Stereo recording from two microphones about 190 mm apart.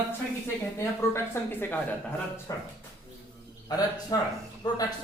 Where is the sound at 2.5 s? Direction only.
15° left (ahead or behind).